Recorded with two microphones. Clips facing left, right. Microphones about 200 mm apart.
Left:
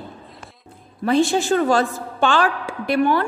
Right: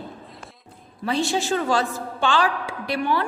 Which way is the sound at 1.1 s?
50° left (ahead or behind).